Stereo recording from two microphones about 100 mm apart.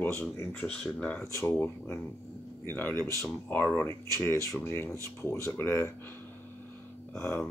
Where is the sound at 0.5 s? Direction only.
10° left (ahead or behind).